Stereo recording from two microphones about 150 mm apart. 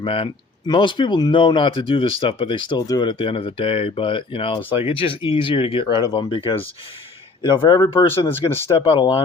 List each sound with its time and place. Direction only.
0.0 s speech: 35° left (ahead or behind)
8.3 s speech: 15° left (ahead or behind)
8.7 s speech: 30° left (ahead or behind)